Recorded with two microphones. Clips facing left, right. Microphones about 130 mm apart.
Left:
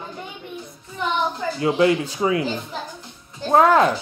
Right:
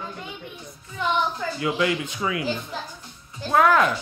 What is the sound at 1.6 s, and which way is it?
Speech, 30° left (ahead or behind).